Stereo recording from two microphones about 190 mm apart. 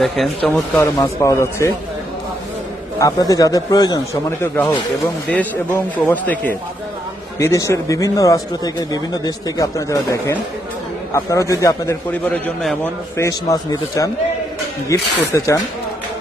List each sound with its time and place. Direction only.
0.4 s speech: 5° left (ahead or behind)
0.9 s speech: 15° left (ahead or behind)
3.0 s speech: 20° left (ahead or behind)